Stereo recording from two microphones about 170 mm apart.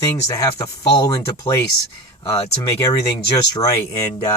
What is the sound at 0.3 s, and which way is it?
Speech, 20° left (ahead or behind).